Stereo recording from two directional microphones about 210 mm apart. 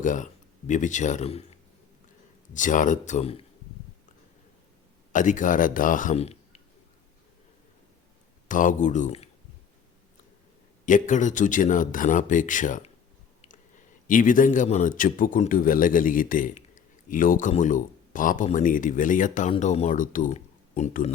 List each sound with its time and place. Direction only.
0.0 s speech: 35° left (ahead or behind)
5.1 s speech: 35° left (ahead or behind)
8.4 s speech: 40° left (ahead or behind)
10.8 s a man's voice: 35° left (ahead or behind)